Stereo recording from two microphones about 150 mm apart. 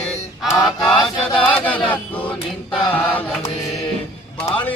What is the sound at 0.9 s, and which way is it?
Chant, 35° left (ahead or behind).